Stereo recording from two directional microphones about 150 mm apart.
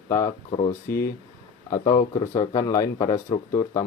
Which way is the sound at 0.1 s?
20° left (ahead or behind).